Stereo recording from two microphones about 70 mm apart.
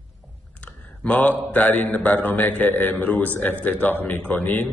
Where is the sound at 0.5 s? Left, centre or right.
Centre.